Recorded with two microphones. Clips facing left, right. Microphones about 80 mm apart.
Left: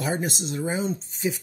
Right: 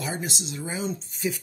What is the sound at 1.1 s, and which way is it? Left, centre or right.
Speech, left.